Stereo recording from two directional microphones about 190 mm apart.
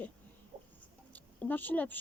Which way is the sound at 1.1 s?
10° left (ahead or behind).